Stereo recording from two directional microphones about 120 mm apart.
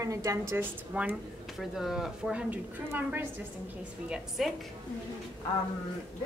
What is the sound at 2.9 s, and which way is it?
Speech, 15° right (ahead or behind).